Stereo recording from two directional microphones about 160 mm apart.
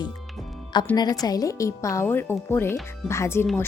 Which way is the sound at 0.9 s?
25° left (ahead or behind).